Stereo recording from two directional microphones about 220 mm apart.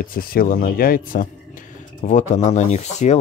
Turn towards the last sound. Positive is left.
turn(degrees=30)  # may be behind; listen again after turning